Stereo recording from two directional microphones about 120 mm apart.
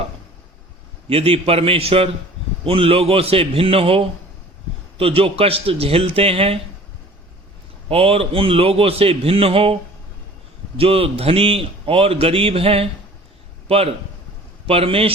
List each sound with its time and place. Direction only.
1.0 s a man's voice: 55° right (ahead or behind)
7.9 s a man's voice: 55° right (ahead or behind)
10.8 s a man's voice: 55° right (ahead or behind)